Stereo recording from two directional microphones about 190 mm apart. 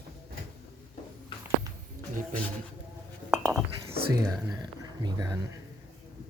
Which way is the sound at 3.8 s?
20° right (ahead or behind).